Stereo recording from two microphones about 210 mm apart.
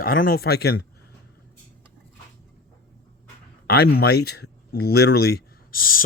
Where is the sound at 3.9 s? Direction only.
45° left (ahead or behind).